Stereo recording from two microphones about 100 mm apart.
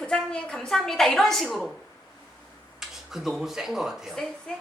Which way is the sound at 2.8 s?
5° right (ahead or behind).